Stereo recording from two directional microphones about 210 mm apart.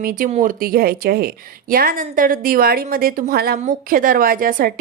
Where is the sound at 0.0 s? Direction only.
40° right (ahead or behind).